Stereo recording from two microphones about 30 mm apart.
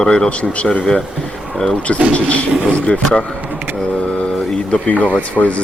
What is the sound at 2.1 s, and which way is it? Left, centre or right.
Speech, left.